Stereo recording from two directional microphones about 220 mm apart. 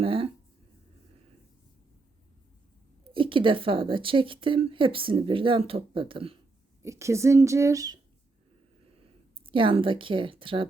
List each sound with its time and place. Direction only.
0.0 s a sound: 25° right (ahead or behind)
3.1 s a woman's voice: 25° right (ahead or behind)
6.8 s speech: 15° right (ahead or behind)
9.5 s a woman's voice: 25° right (ahead or behind)